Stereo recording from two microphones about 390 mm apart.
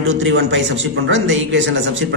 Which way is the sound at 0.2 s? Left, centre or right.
Right.